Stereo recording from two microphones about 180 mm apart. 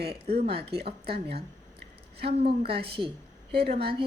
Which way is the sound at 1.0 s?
60° right (ahead or behind).